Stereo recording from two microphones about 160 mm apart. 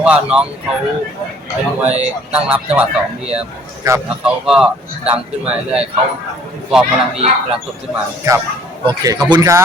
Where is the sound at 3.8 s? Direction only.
20° right (ahead or behind).